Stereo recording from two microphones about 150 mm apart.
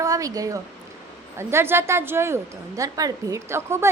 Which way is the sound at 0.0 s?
20° right (ahead or behind).